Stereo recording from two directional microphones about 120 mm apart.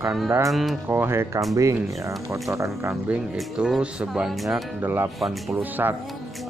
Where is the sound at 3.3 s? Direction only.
5° right (ahead or behind).